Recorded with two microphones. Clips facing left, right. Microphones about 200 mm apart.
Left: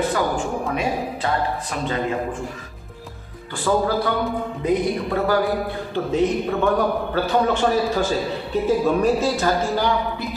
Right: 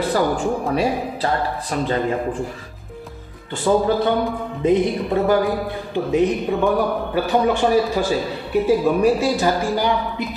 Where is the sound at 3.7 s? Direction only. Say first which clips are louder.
Right 3 dB; 20° right (ahead or behind).